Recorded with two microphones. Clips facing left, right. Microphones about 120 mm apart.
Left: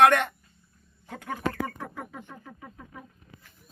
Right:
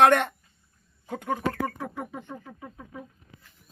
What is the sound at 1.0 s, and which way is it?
Music, 15° right (ahead or behind).